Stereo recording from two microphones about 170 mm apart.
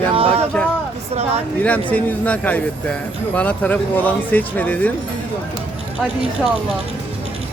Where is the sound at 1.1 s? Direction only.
40° right (ahead or behind).